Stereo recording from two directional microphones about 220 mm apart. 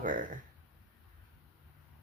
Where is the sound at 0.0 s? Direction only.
35° right (ahead or behind).